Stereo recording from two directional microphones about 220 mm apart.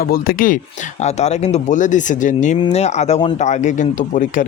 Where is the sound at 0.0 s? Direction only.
40° left (ahead or behind).